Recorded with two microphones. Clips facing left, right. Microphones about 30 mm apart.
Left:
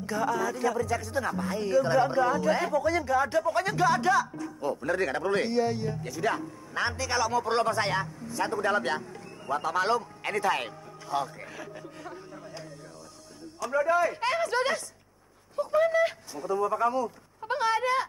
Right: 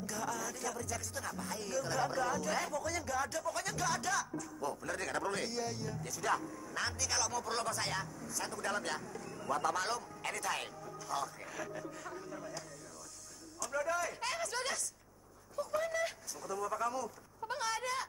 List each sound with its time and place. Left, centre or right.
0.0 s a man's voice: left